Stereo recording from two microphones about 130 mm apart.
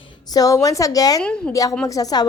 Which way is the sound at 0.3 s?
25° left (ahead or behind).